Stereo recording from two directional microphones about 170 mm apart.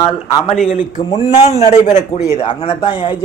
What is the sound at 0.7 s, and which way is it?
Speech, 50° left (ahead or behind).